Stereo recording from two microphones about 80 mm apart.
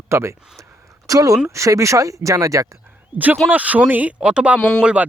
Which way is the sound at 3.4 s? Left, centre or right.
Centre.